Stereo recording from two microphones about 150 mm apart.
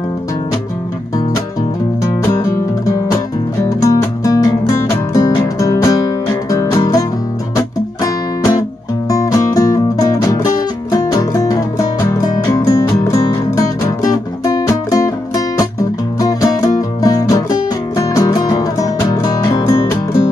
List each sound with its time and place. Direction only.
2.3 s music: 20° left (ahead or behind)